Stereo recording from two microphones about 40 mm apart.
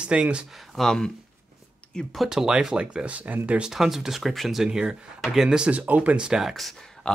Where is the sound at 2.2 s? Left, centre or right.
Centre.